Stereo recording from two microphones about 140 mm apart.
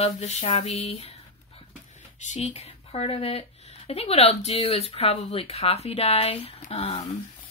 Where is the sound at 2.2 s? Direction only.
55° left (ahead or behind).